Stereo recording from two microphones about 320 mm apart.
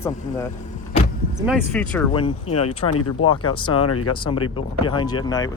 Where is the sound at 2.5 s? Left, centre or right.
Left.